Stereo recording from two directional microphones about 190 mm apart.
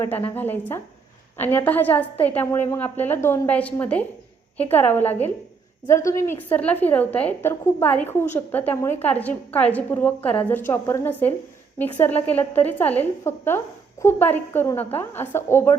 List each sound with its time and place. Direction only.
0.0 s a woman's voice: 10° left (ahead or behind)